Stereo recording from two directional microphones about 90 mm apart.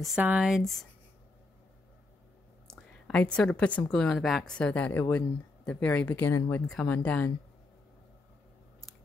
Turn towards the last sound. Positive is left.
turn(degrees=20)  # may be behind; listen again after turning